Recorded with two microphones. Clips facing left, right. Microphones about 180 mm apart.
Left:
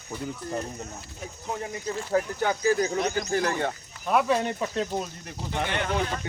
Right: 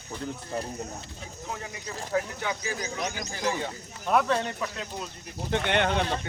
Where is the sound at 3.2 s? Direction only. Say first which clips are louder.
Left 4 dB; 60° left (ahead or behind).